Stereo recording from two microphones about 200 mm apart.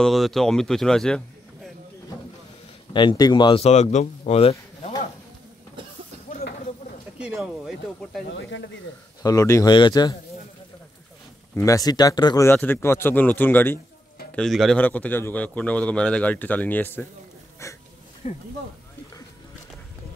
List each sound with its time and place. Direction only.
0.0 s a man's voice: centre (ahead or behind)
2.9 s a man's voice: 25° left (ahead or behind)
7.2 s speech: 5° right (ahead or behind)
8.3 s speech: 65° left (ahead or behind)
9.2 s speech: 15° left (ahead or behind)
11.5 s a man's voice: 15° left (ahead or behind)
18.2 s speech: 30° left (ahead or behind)